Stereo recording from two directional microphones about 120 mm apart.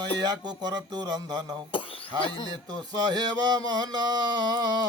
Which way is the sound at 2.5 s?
35° right (ahead or behind).